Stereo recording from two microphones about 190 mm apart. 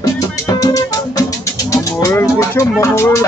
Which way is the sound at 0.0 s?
20° left (ahead or behind).